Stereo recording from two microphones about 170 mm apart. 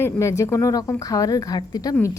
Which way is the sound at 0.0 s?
15° left (ahead or behind).